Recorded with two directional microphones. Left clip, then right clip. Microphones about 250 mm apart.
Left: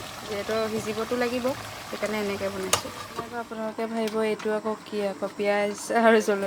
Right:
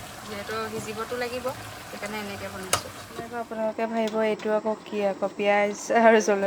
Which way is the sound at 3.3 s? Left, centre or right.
Centre.